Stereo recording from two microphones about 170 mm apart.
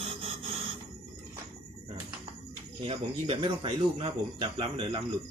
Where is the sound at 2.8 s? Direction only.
30° right (ahead or behind).